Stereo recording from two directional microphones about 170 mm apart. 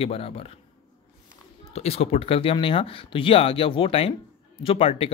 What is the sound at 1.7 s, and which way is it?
Speech, 35° left (ahead or behind).